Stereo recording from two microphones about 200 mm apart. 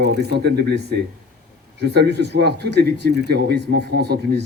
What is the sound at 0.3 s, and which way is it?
Speech, 55° right (ahead or behind).